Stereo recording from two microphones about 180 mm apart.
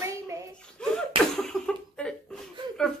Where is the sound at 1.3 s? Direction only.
Centre (ahead or behind).